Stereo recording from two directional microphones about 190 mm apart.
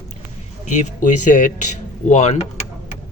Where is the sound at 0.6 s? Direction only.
40° left (ahead or behind).